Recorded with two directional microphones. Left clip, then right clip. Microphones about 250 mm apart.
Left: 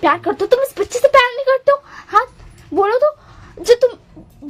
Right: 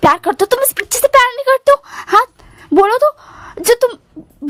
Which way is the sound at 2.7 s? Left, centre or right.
Right.